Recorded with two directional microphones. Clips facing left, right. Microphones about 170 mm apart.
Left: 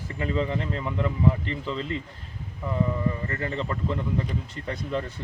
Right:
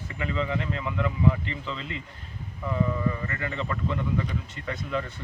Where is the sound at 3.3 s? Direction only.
35° left (ahead or behind).